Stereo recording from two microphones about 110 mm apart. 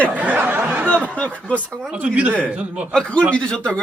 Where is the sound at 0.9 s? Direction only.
10° left (ahead or behind).